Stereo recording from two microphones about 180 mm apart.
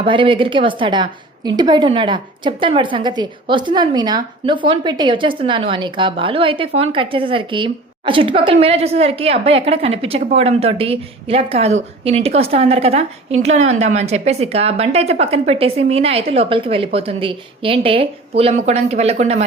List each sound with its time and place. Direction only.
0.0 s a woman's voice: 30° right (ahead or behind)